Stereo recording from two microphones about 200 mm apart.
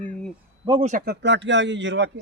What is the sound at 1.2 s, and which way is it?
Speech, 60° right (ahead or behind).